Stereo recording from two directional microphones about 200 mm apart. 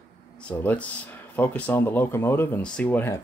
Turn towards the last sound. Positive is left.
turn(degrees=10)  # may be behind; listen again after turning